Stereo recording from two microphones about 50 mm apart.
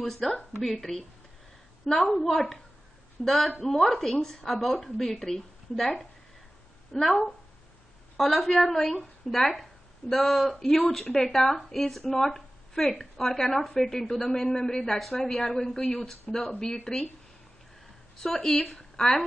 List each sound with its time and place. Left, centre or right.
0.0 s speech: centre
2.0 s a woman's voice: centre
18.2 s speech: centre